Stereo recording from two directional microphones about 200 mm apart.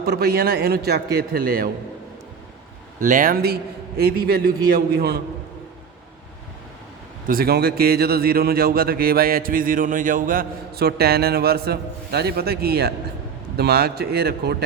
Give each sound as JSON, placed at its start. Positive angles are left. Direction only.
{"t": 0.0, "sound": "speech", "side_deg": -50}
{"t": 3.0, "sound": "speech", "side_deg": -45}
{"t": 7.3, "sound": "speech", "side_deg": -50}